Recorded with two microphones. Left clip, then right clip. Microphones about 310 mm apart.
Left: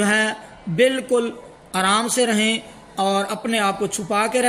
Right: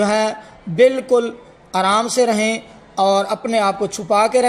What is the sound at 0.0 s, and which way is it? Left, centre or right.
A man's voice, centre.